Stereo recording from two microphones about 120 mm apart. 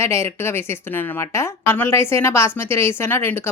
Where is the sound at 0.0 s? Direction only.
20° left (ahead or behind).